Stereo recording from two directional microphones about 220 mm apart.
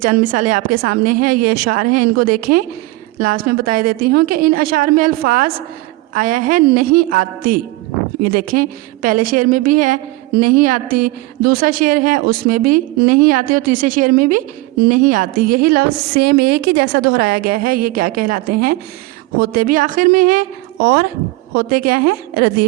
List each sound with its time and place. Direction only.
0.0 s a woman's voice: 40° right (ahead or behind)